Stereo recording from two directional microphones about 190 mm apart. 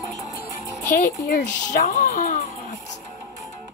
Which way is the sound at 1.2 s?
45° left (ahead or behind).